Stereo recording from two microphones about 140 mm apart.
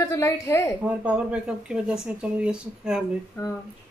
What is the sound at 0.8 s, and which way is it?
Speech, 10° right (ahead or behind).